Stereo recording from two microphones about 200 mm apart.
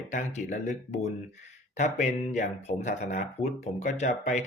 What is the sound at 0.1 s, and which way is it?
Speech, 40° left (ahead or behind).